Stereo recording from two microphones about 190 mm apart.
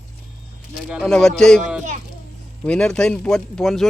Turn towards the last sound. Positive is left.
turn(degrees=0)  # may be behind; listen again after turning